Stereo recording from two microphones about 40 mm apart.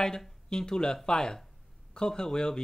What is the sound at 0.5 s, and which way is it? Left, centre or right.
Speech, centre.